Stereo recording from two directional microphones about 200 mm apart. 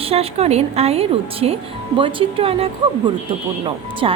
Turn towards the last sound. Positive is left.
turn(degrees=-25)  # may be behind; listen again after turning